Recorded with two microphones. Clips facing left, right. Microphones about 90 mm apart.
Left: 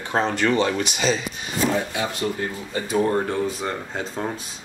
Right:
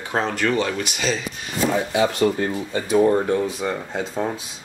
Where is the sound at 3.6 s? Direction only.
5° right (ahead or behind).